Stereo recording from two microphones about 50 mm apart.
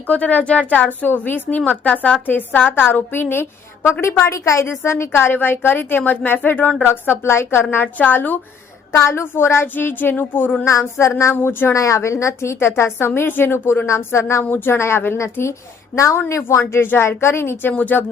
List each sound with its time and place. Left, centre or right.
0.1 s a woman's voice: left
7.3 s a woman's voice: left
7.6 s a woman's voice: left
7.9 s a woman's voice: left
8.9 s a woman's voice: left
10.7 s speech: left
11.7 s a woman's voice: left
13.8 s speech: left
14.4 s a woman's voice: left
14.7 s a woman's voice: left
17.7 s a woman's voice: left